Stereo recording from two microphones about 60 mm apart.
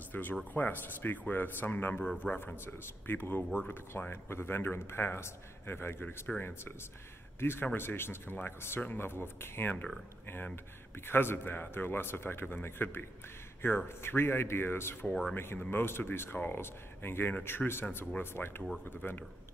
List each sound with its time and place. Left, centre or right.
0.1 s speech: left
15.0 s speech: centre
15.3 s speech: left
18.9 s speech: left